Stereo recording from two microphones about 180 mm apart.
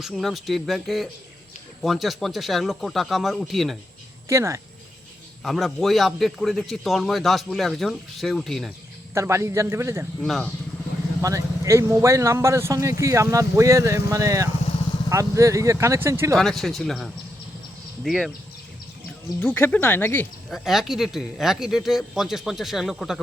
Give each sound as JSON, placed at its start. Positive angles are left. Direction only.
{"t": 0.0, "sound": "a man's voice", "side_deg": 0}
{"t": 4.3, "sound": "a man's voice", "side_deg": -15}
{"t": 5.4, "sound": "a man's voice", "side_deg": 0}
{"t": 9.1, "sound": "a man's voice", "side_deg": -15}
{"t": 10.2, "sound": "a man's voice", "side_deg": 5}
{"t": 11.2, "sound": "a man's voice", "side_deg": -20}
{"t": 16.4, "sound": "a man's voice", "side_deg": 0}
{"t": 19.4, "sound": "speech", "side_deg": 10}
{"t": 20.5, "sound": "a man's voice", "side_deg": 0}